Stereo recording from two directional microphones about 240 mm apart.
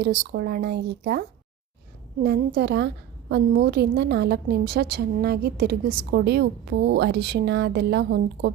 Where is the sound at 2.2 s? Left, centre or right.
Right.